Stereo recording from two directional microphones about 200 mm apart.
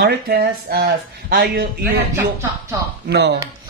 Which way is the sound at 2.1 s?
15° right (ahead or behind).